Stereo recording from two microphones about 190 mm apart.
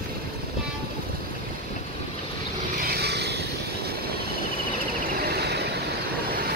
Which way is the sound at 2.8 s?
55° right (ahead or behind).